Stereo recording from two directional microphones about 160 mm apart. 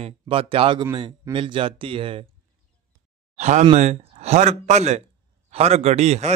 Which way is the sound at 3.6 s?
45° right (ahead or behind).